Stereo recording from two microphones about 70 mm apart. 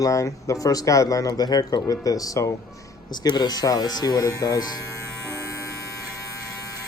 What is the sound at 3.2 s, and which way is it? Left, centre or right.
Speech, left.